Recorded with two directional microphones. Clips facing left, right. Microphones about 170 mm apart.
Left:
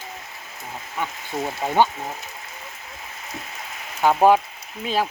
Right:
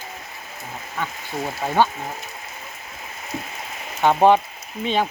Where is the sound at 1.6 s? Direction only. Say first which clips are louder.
Even; 15° left (ahead or behind).